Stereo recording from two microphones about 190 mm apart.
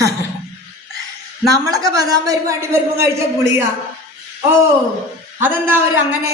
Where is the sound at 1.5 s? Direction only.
20° right (ahead or behind).